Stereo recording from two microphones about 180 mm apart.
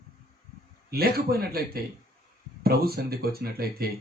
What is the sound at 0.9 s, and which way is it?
Speech, 60° right (ahead or behind).